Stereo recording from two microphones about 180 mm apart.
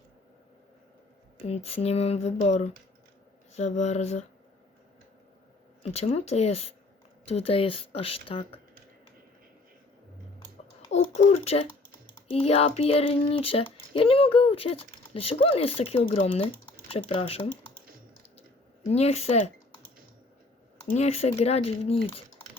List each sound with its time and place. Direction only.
1.5 s speech: 35° left (ahead or behind)
5.8 s speech: 35° left (ahead or behind)
11.1 s speech: 35° left (ahead or behind)
18.9 s speech: 35° left (ahead or behind)
20.9 s speech: 35° left (ahead or behind)